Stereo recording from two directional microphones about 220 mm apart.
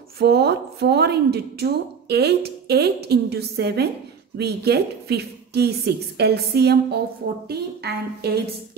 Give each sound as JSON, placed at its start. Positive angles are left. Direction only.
{"t": 0.2, "sound": "a woman's voice", "side_deg": -50}